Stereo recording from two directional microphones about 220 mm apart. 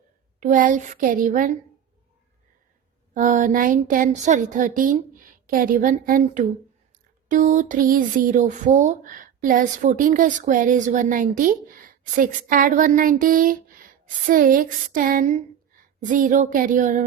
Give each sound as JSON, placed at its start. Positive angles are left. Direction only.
{"t": 0.3, "sound": "speech", "side_deg": -35}
{"t": 3.2, "sound": "speech", "side_deg": -35}